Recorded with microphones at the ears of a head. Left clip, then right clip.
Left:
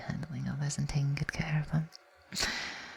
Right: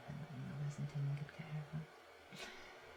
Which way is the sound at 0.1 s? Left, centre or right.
Left.